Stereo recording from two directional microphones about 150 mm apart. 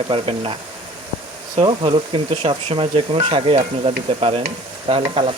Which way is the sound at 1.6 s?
35° right (ahead or behind).